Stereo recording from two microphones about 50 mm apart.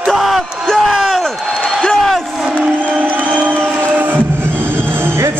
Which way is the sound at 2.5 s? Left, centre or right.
Right.